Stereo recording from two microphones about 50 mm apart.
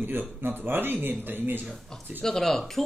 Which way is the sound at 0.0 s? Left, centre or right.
Right.